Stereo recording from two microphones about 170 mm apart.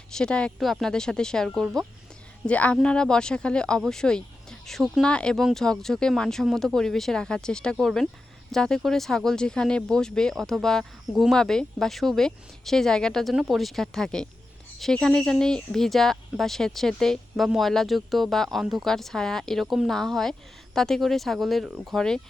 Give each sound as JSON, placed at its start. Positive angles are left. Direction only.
{"t": 0.1, "sound": "speech", "side_deg": 5}